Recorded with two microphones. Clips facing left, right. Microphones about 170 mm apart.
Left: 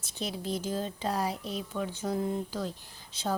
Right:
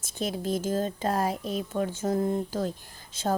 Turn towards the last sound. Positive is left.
turn(degrees=-50)  # may be behind; listen again after turning